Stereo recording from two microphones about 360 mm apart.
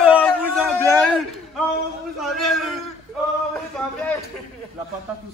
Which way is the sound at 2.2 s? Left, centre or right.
Centre.